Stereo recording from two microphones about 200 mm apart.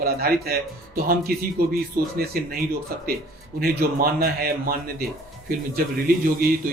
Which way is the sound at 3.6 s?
50° right (ahead or behind).